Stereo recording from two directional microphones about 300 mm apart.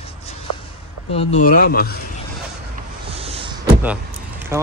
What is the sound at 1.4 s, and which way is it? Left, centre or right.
Speech, left.